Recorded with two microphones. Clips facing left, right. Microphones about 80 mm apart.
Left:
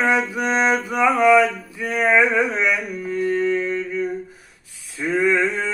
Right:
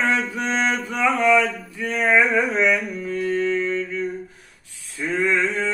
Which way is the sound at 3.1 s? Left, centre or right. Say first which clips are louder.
Left 2 dB; centre.